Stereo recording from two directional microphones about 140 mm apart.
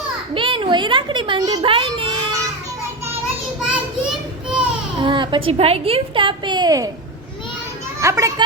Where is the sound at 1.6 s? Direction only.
40° right (ahead or behind).